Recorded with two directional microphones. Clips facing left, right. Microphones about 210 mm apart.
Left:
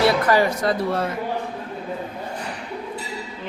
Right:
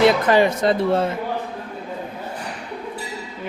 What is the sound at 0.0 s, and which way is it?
Speech, 20° right (ahead or behind).